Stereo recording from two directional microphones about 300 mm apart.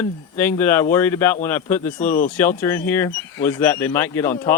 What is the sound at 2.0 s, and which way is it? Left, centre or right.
Speech, left.